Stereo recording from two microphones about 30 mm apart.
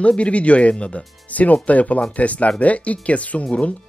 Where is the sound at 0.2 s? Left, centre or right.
Left.